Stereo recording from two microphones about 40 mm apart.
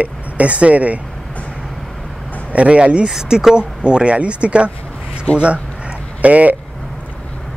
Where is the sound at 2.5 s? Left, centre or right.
Right.